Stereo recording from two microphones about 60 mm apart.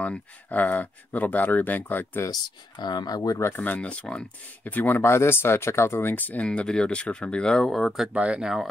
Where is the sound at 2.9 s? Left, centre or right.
Left.